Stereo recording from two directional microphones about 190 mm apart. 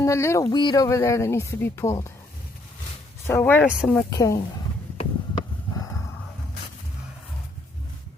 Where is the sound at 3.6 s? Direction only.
5° right (ahead or behind).